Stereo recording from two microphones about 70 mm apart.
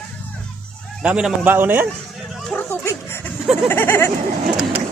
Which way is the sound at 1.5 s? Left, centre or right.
Right.